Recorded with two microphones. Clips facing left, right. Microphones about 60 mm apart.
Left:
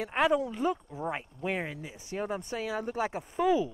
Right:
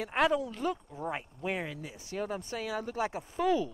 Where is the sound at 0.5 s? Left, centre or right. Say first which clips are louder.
Left 3 dB; centre.